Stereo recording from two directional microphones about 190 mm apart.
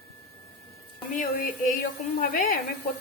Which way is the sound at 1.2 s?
45° left (ahead or behind).